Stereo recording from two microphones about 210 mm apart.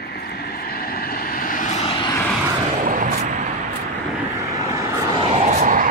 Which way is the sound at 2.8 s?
40° right (ahead or behind).